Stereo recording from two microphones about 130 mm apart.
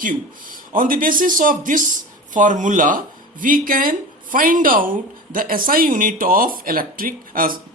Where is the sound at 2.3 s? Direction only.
80° right.